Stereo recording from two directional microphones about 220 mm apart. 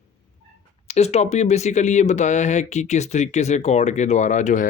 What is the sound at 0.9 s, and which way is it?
Speech, 30° left (ahead or behind).